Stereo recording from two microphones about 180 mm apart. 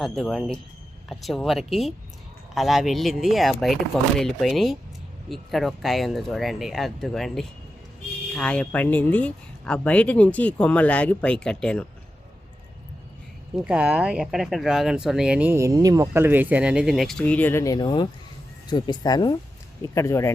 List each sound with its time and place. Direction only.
0.0 s speech: centre (ahead or behind)
13.7 s speech: 5° right (ahead or behind); by 20.3 s 15° left (ahead or behind)